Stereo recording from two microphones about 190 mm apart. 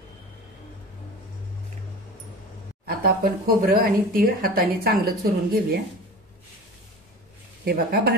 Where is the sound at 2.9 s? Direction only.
50° right (ahead or behind).